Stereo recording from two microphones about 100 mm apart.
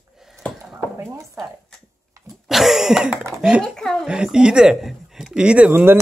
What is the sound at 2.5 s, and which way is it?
Cough, 5° right (ahead or behind).